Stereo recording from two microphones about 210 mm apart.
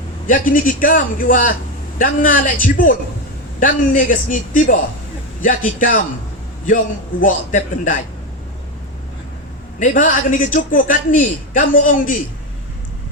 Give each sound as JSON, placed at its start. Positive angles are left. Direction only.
{"t": 0.3, "sound": "a man's voice", "side_deg": 40}
{"t": 7.2, "sound": "a man's voice", "side_deg": 40}
{"t": 9.8, "sound": "a man's voice", "side_deg": 40}